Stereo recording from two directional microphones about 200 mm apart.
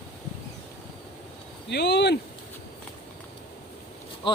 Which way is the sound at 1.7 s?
55° left (ahead or behind).